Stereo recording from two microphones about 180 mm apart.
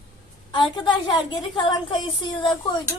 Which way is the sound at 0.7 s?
25° left (ahead or behind).